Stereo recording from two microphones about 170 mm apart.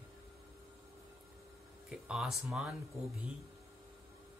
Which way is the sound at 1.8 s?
5° right (ahead or behind).